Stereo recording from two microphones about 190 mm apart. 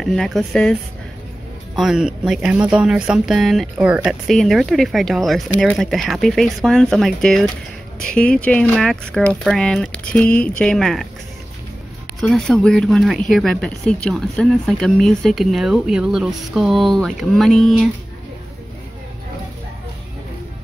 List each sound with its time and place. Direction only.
0.0 s speech: centre (ahead or behind)
1.8 s speech: 5° right (ahead or behind)
12.2 s speech: 5° left (ahead or behind)